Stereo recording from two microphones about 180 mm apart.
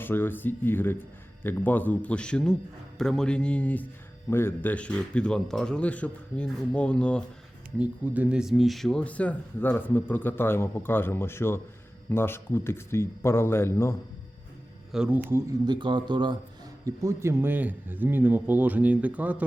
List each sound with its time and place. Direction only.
0.0 s a man's voice: 10° left (ahead or behind)
7.8 s speech: 10° right (ahead or behind); by 13.9 s 15° left (ahead or behind)
14.9 s a man's voice: 5° right (ahead or behind)
15.6 s a man's voice: 25° right (ahead or behind); by 19.5 s 10° right (ahead or behind)